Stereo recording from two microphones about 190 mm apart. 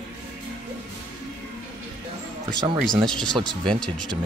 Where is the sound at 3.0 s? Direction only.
5° left (ahead or behind).